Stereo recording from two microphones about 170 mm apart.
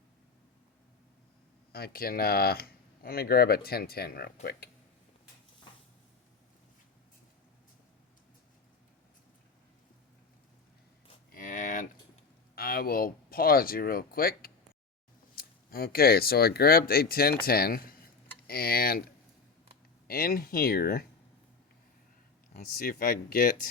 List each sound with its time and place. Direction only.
1.7 s speech: 65° left (ahead or behind)
11.3 s a sound: 50° left (ahead or behind)
12.5 s speech: 60° left (ahead or behind)
22.5 s speech: 60° left (ahead or behind)